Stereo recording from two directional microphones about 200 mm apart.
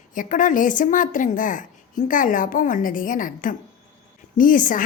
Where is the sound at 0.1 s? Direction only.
40° left (ahead or behind).